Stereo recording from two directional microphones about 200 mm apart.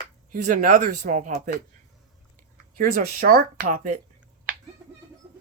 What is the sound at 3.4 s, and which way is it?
Speech, 40° right (ahead or behind).